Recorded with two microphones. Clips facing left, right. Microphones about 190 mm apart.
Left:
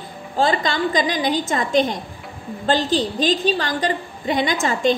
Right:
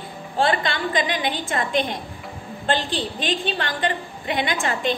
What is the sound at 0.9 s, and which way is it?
A woman's voice, 40° left (ahead or behind).